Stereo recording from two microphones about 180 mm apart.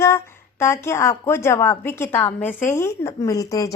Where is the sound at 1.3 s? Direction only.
15° left (ahead or behind).